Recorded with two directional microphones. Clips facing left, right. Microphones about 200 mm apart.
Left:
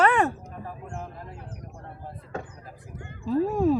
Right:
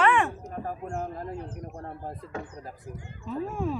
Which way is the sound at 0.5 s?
45° right (ahead or behind).